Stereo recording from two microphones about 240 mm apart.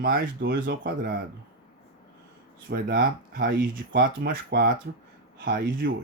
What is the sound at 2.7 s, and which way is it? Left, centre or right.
A man's voice, right.